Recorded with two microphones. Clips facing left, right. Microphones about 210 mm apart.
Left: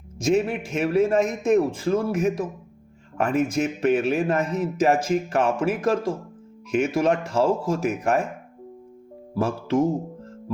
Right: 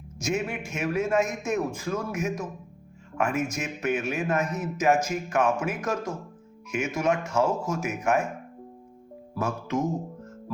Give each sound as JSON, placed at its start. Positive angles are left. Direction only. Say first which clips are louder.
{"t": 0.2, "sound": "a man's voice", "louder": "left 7 dB", "side_deg": 35}
{"t": 9.3, "sound": "speech", "louder": "left 5 dB", "side_deg": 30}
{"t": 9.8, "sound": "music", "louder": "left 6 dB", "side_deg": 30}